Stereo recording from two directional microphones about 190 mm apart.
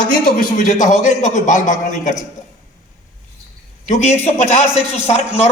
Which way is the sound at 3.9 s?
35° left (ahead or behind).